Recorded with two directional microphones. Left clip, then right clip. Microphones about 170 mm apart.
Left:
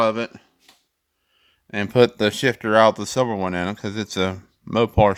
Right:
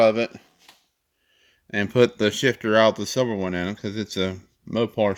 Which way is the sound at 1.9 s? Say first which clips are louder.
Left 3 dB; 10° left (ahead or behind).